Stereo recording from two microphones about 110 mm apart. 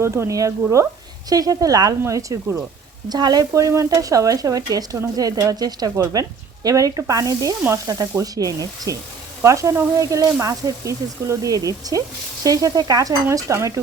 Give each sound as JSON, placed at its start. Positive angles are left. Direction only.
{"t": 0.0, "sound": "speech", "side_deg": -25}